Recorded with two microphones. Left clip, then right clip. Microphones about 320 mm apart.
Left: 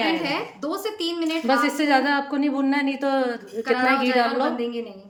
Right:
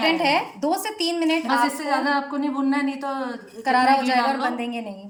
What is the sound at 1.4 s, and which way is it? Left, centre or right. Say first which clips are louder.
A woman's voice: left 1 dB; left.